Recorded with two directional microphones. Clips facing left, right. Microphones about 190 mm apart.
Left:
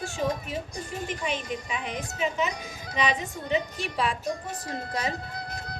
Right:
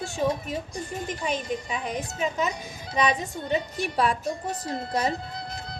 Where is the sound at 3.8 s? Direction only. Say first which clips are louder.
Right 4 dB; 40° right (ahead or behind).